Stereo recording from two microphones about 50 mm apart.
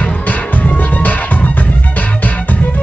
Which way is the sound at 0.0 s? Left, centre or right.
Left.